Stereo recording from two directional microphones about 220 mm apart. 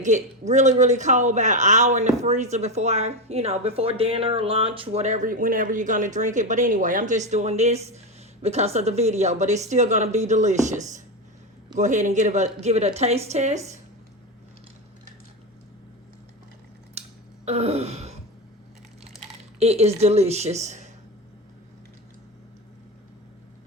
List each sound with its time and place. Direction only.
0.0 s speech: 35° right (ahead or behind)
17.0 s a sound: 30° right (ahead or behind)
17.4 s gasp: 25° right (ahead or behind)
19.5 s speech: 30° right (ahead or behind)